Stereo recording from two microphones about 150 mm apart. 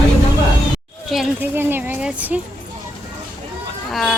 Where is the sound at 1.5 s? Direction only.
15° right (ahead or behind).